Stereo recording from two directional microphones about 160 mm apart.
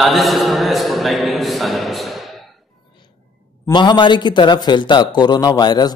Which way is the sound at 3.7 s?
30° left (ahead or behind).